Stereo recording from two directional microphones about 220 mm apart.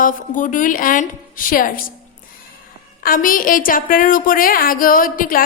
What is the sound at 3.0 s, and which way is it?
A woman's voice, 40° left (ahead or behind).